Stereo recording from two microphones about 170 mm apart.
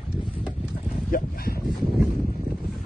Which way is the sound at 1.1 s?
60° left (ahead or behind).